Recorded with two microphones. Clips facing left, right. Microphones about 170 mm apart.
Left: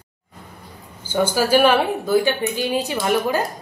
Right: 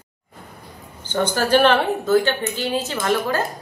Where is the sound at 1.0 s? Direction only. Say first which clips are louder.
Left 2 dB; 10° left (ahead or behind).